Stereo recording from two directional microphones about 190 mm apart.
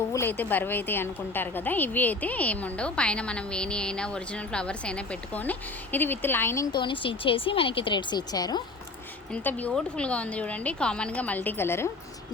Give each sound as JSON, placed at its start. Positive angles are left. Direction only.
{"t": 0.1, "sound": "a woman's voice", "side_deg": 10}
{"t": 6.7, "sound": "speech", "side_deg": 25}
{"t": 9.3, "sound": "a woman's voice", "side_deg": 10}